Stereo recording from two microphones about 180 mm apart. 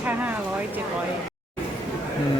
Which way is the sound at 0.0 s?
10° right (ahead or behind).